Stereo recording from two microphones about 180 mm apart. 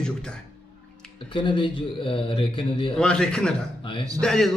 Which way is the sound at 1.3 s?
25° left (ahead or behind).